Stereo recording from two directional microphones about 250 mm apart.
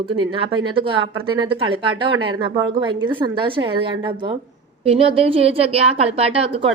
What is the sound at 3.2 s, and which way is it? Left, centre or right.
A woman's voice, centre.